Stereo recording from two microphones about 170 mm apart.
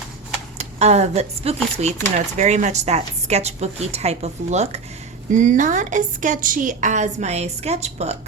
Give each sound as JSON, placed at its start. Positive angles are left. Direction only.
{"t": 0.6, "sound": "a woman's voice", "side_deg": -40}